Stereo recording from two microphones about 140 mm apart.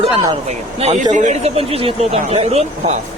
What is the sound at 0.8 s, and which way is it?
Speech, 50° right (ahead or behind).